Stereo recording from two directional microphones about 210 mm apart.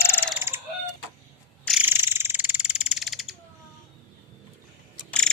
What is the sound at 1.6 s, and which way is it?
Frog, 5° right (ahead or behind).